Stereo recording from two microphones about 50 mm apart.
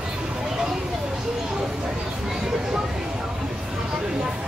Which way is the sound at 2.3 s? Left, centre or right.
Centre.